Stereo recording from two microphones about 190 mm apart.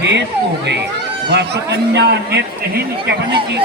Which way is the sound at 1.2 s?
60° right (ahead or behind).